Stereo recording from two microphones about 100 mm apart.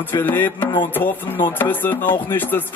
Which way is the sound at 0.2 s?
20° left (ahead or behind).